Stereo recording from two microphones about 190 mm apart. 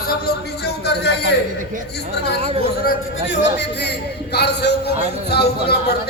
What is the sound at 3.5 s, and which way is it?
Speech, 65° left (ahead or behind).